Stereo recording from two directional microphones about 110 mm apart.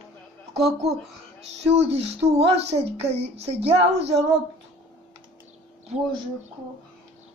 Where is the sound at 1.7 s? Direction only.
75° right (ahead or behind).